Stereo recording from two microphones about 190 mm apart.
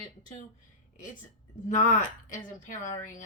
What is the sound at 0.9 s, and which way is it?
A woman's voice, 45° left (ahead or behind).